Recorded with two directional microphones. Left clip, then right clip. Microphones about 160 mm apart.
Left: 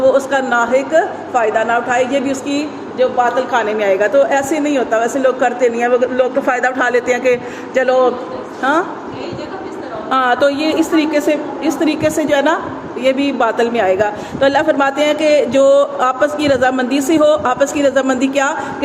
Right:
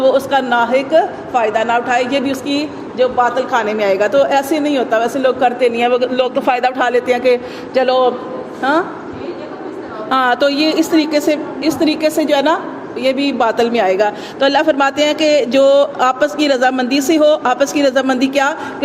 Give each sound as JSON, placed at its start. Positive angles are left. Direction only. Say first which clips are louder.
{"t": 0.0, "sound": "speech", "louder": "even", "side_deg": -35}
{"t": 1.4, "sound": "a woman's voice", "louder": "even", "side_deg": -50}
{"t": 10.1, "sound": "speech", "louder": "even", "side_deg": -35}